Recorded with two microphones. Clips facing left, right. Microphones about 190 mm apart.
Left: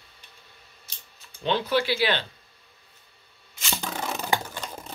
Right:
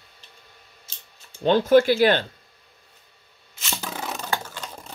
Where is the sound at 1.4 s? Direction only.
45° right (ahead or behind).